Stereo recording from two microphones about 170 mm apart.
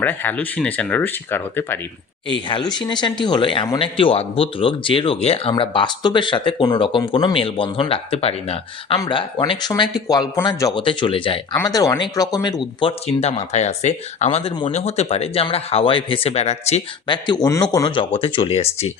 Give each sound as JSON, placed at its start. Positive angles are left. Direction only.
{"t": 0.0, "sound": "speech", "side_deg": 10}
{"t": 2.5, "sound": "speech", "side_deg": 25}
{"t": 9.0, "sound": "speech", "side_deg": 25}
{"t": 11.5, "sound": "speech", "side_deg": 20}
{"t": 13.1, "sound": "speech", "side_deg": 40}
{"t": 17.2, "sound": "speech", "side_deg": 20}